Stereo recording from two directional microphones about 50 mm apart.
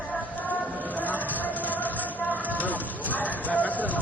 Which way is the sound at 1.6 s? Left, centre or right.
Left.